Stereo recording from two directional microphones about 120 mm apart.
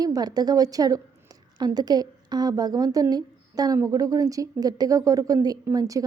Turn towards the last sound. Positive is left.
turn(degrees=-30)  # may be behind; listen again after turning